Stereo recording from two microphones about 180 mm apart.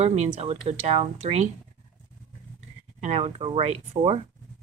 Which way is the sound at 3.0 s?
40° right (ahead or behind).